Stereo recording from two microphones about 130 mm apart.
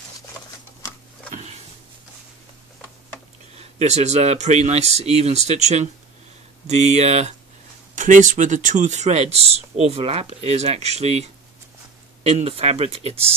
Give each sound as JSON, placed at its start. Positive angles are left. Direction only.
{"t": 1.3, "sound": "a sound", "side_deg": -60}
{"t": 3.5, "sound": "speech", "side_deg": -55}
{"t": 7.9, "sound": "speech", "side_deg": -80}